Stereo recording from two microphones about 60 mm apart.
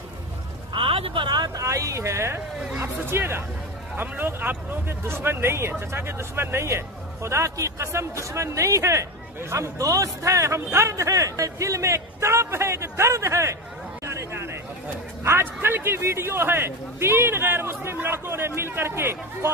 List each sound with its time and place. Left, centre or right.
1.5 s speech: right
2.8 s speech: right
14.0 s chatter: right
15.2 s speech: right